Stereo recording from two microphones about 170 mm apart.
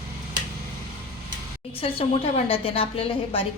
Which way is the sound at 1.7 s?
35° left (ahead or behind).